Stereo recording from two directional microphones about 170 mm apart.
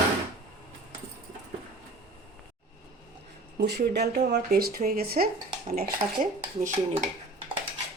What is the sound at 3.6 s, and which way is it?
Speech, 75° right (ahead or behind).